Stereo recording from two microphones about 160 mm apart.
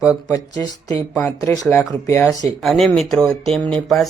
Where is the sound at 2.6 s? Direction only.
Centre (ahead or behind).